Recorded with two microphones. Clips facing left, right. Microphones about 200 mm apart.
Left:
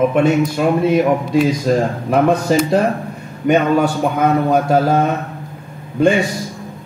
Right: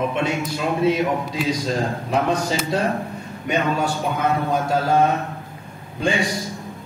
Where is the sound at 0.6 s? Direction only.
55° left (ahead or behind).